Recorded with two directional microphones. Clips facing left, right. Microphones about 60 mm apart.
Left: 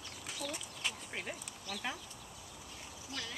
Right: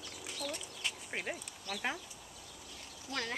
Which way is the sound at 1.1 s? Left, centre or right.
Right.